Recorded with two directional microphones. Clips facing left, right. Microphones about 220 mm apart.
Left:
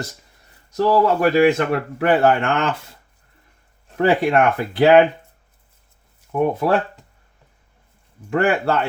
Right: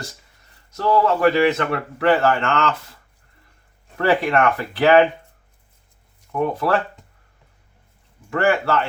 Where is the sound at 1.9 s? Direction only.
15° left (ahead or behind).